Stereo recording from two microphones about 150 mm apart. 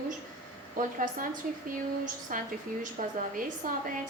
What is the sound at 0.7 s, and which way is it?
A woman's voice, 65° right (ahead or behind).